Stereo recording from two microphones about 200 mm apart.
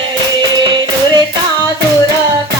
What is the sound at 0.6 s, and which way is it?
Music, 25° right (ahead or behind).